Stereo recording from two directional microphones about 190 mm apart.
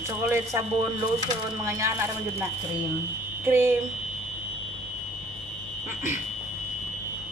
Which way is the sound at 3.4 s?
10° right (ahead or behind).